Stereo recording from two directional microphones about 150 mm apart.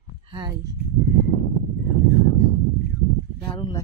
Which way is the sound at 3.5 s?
30° left (ahead or behind).